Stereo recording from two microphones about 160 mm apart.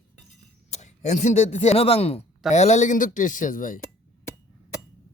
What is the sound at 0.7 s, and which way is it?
Speech, 45° left (ahead or behind).